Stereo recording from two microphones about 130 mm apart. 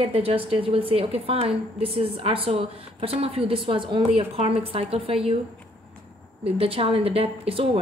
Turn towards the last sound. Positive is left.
turn(degrees=-45)  # may be behind; listen again after turning